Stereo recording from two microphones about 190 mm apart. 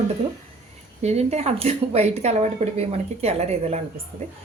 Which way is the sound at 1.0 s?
35° right (ahead or behind).